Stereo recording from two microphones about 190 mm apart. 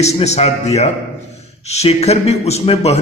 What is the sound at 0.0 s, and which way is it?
A man's voice, 35° left (ahead or behind).